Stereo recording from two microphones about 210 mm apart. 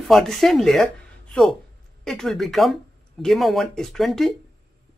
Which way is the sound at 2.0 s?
Centre (ahead or behind).